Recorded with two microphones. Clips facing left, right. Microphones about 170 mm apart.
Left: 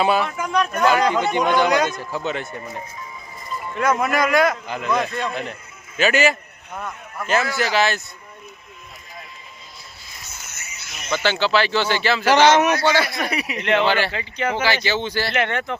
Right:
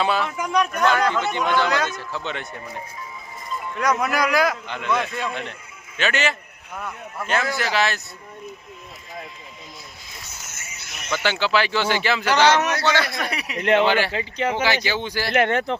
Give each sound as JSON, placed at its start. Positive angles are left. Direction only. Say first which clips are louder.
{"t": 0.0, "sound": "a man's voice", "louder": "left 3 dB", "side_deg": 10}
{"t": 0.3, "sound": "speech", "louder": "even", "side_deg": -15}
{"t": 0.8, "sound": "a man's voice", "louder": "left 4 dB", "side_deg": 10}
{"t": 7.5, "sound": "a man's voice", "louder": "left 3 dB", "side_deg": 0}
{"t": 10.4, "sound": "music", "louder": "even", "side_deg": -50}
{"t": 11.2, "sound": "speech", "louder": "left 2 dB", "side_deg": -10}
{"t": 12.4, "sound": "a man's voice", "louder": "left 3 dB", "side_deg": 15}
{"t": 13.6, "sound": "speech", "louder": "right 2 dB", "side_deg": -40}
{"t": 13.8, "sound": "speech", "louder": "even", "side_deg": -15}
{"t": 14.1, "sound": "speech", "louder": "right 1 dB", "side_deg": -35}
{"t": 14.5, "sound": "speech", "louder": "left 2 dB", "side_deg": -15}
{"t": 15.3, "sound": "speech", "louder": "right 8 dB", "side_deg": -45}